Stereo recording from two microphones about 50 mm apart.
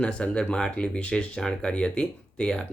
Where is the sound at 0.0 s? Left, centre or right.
Centre.